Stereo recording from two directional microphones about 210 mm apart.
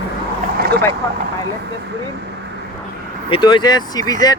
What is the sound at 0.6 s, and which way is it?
Vehicle, 50° right (ahead or behind).